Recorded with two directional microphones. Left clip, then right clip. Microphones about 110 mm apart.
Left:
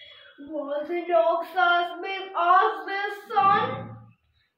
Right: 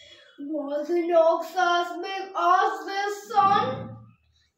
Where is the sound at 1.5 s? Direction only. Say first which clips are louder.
Left 1 dB; 20° right (ahead or behind).